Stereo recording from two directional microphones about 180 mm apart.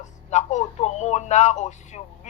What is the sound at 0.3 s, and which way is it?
Speech, 40° left (ahead or behind).